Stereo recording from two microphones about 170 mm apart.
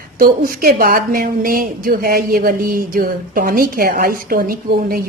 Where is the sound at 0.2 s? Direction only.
60° right (ahead or behind).